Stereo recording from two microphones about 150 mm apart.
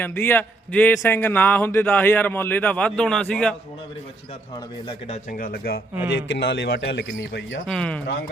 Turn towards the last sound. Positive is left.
turn(degrees=5)  # may be behind; listen again after turning